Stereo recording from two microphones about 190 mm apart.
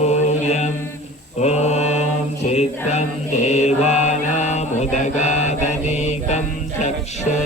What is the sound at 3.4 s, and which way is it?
Mantra, 35° left (ahead or behind).